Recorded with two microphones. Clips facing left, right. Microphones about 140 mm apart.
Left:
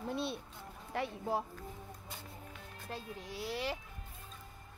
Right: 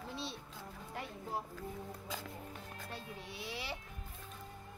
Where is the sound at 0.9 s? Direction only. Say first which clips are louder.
Left 7 dB; 90° left.